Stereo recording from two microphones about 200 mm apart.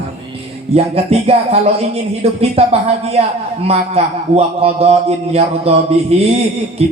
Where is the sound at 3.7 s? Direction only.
30° right (ahead or behind).